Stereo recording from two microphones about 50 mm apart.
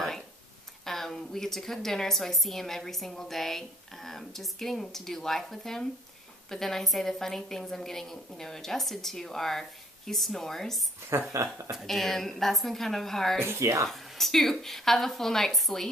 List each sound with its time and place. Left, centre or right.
0.8 s a woman's voice: centre
11.1 s speech: right
11.8 s a woman's voice: centre
13.4 s speech: right
13.8 s a woman's voice: centre